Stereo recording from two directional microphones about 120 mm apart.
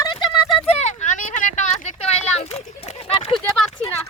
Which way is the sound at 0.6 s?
65° left (ahead or behind).